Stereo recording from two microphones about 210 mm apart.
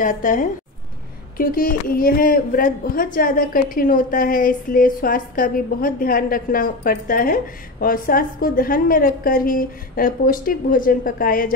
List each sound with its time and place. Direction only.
0.0 s a woman's voice: 40° left (ahead or behind)